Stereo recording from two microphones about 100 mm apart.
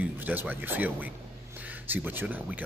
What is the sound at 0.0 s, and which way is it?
Speech, 20° right (ahead or behind).